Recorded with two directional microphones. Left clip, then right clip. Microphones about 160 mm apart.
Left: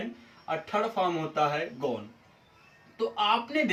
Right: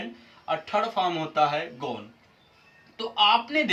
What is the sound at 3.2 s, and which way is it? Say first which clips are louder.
Speech: right 6 dB; 15° right (ahead or behind).